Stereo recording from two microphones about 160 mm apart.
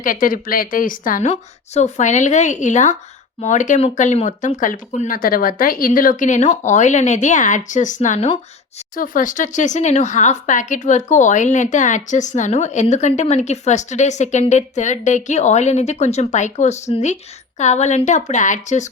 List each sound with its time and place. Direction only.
0.0 s speech: 60° left (ahead or behind)